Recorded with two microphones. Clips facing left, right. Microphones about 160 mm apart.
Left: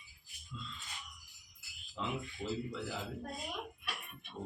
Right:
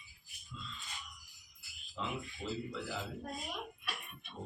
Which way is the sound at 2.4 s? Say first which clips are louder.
Left 2 dB; 10° left (ahead or behind).